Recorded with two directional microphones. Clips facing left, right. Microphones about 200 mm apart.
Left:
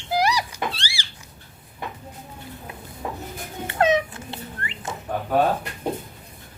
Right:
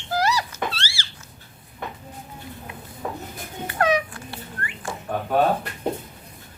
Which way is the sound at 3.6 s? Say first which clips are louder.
Left 2 dB; 25° left (ahead or behind).